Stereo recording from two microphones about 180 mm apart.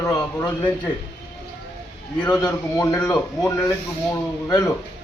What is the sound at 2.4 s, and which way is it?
Speech, 20° left (ahead or behind).